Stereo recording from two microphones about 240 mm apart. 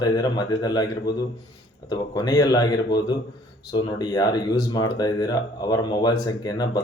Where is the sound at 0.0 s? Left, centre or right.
Centre.